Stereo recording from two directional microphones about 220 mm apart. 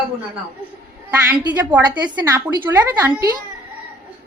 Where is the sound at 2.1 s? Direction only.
20° right (ahead or behind).